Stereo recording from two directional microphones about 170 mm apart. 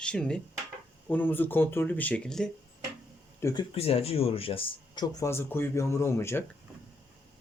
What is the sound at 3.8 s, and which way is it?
Speech, 35° left (ahead or behind).